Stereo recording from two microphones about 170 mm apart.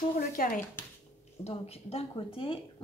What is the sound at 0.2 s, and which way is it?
Speech, 55° left (ahead or behind).